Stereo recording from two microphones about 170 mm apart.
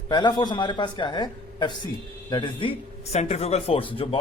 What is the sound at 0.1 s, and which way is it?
A man's voice, 25° left (ahead or behind).